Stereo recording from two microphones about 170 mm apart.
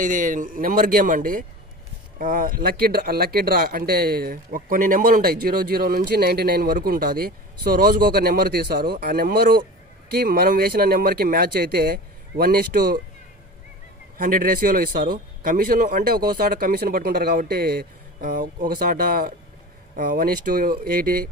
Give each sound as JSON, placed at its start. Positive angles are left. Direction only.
{"t": 0.0, "sound": "speech", "side_deg": -50}
{"t": 14.1, "sound": "speech", "side_deg": -55}